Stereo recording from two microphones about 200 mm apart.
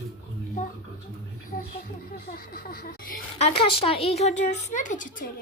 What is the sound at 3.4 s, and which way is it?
Speech, 25° left (ahead or behind).